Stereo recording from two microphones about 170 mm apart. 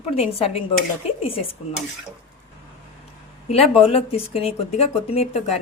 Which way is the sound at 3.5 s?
35° left (ahead or behind).